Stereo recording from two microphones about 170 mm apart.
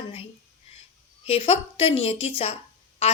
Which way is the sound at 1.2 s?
35° left (ahead or behind).